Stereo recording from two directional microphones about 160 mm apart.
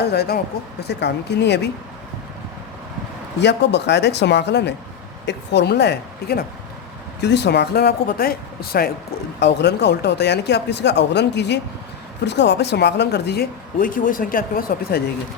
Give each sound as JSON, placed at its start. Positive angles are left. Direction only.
{"t": 0.0, "sound": "speech", "side_deg": 85}
{"t": 3.4, "sound": "speech", "side_deg": 90}
{"t": 9.4, "sound": "speech", "side_deg": 90}